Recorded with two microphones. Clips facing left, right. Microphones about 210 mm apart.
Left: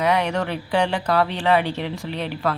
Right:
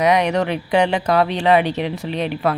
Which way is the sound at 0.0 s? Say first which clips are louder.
Right 4 dB; 15° right (ahead or behind).